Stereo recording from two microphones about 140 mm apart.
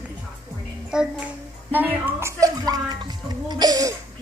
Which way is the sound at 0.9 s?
5° right (ahead or behind).